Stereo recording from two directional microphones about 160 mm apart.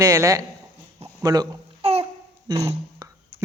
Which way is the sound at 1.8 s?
40° right (ahead or behind).